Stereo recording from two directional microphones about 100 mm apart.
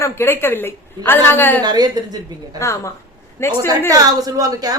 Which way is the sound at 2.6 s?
30° left (ahead or behind).